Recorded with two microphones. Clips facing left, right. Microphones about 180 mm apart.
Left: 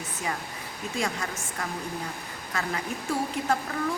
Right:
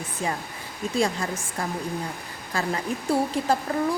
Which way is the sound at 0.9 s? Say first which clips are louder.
Right 6 dB; 30° right (ahead or behind).